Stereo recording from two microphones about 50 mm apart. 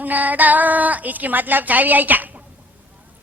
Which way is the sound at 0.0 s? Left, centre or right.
Right.